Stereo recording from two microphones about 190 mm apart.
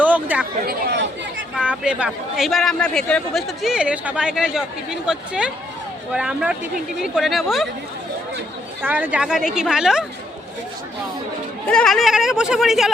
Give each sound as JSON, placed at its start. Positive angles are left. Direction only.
{"t": 0.0, "sound": "chatter", "side_deg": -10}
{"t": 0.6, "sound": "chatter", "side_deg": -55}
{"t": 1.5, "sound": "a man's voice", "side_deg": -5}
{"t": 8.8, "sound": "a man's voice", "side_deg": -10}
{"t": 11.7, "sound": "a man's voice", "side_deg": 5}